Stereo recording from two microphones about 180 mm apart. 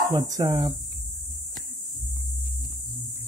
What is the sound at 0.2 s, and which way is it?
Speech, 15° right (ahead or behind).